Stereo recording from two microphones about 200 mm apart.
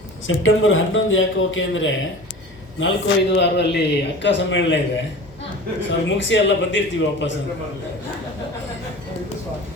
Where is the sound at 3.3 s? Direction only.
60° left (ahead or behind).